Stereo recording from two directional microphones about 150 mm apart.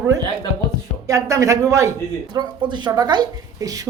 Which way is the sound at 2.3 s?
30° right (ahead or behind).